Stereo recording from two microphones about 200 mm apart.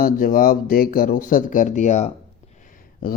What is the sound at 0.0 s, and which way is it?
Speech, 45° left (ahead or behind).